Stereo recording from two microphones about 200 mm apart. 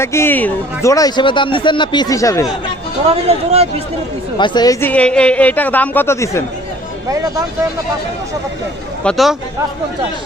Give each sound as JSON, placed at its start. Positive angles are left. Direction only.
{"t": 0.0, "sound": "speech", "side_deg": 10}
{"t": 3.1, "sound": "speech", "side_deg": -30}
{"t": 4.4, "sound": "speech", "side_deg": 20}
{"t": 9.0, "sound": "speech", "side_deg": 0}